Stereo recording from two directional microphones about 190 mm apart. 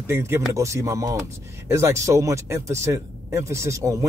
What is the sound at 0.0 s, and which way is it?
Speech, 15° right (ahead or behind).